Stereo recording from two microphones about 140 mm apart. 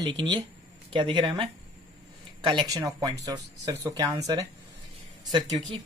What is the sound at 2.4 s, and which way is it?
Speech, 30° right (ahead or behind).